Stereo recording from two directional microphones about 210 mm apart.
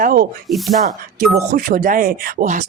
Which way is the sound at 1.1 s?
45° right (ahead or behind).